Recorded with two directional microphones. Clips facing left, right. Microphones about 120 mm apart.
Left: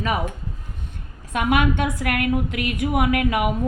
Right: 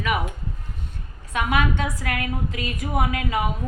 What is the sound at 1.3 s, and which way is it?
A woman's voice, 55° left (ahead or behind).